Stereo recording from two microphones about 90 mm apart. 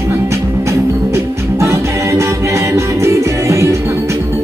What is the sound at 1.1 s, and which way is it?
Music, 30° right (ahead or behind).